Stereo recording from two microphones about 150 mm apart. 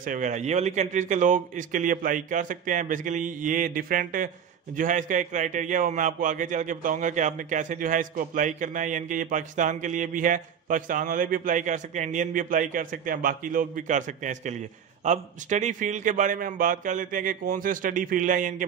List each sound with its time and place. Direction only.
0.0 s a man's voice: 60° right (ahead or behind)